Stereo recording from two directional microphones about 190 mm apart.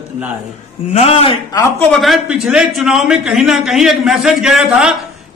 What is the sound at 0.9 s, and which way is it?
Speech, 35° left (ahead or behind).